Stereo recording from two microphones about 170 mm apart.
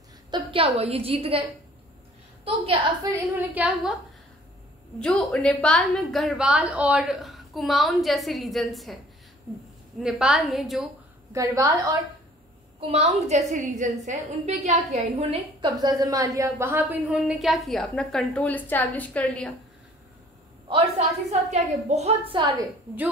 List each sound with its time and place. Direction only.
0.3 s a woman's voice: 30° right (ahead or behind)
2.4 s a woman's voice: 35° right (ahead or behind)
3.0 s a woman's voice: 20° right (ahead or behind)
3.5 s a woman's voice: 5° right (ahead or behind)
5.0 s a woman's voice: 5° left (ahead or behind)
9.9 s a woman's voice: 5° right (ahead or behind)
11.3 s a woman's voice: 20° right (ahead or behind)
12.9 s a woman's voice: 40° right (ahead or behind)
15.6 s a woman's voice: 20° right (ahead or behind); by 19.5 s 5° left (ahead or behind)
20.6 s a woman's voice: 35° right (ahead or behind)